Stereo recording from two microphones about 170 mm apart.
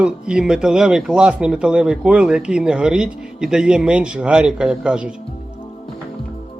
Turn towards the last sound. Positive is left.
turn(degrees=-5)  # may be behind; listen again after turning